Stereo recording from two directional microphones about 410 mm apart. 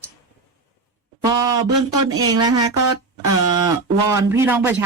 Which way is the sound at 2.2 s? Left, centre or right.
Centre.